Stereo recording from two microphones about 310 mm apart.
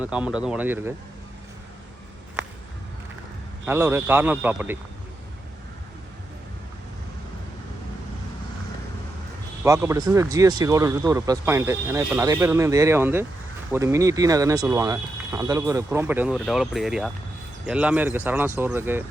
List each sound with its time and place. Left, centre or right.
0.0 s a man's voice: centre
3.7 s speech: centre
9.6 s speech: centre